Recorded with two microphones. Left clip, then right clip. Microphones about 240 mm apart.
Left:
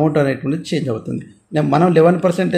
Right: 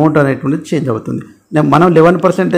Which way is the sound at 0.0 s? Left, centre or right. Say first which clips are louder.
Right 5 dB; centre.